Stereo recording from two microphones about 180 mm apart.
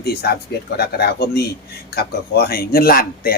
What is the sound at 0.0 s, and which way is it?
Speech, 60° left (ahead or behind).